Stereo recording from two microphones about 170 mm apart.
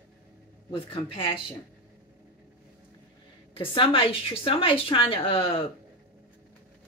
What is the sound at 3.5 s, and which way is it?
A woman's voice, 30° left (ahead or behind).